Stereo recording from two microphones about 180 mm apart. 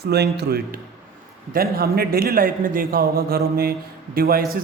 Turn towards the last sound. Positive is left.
turn(degrees=-55)  # may be behind; listen again after turning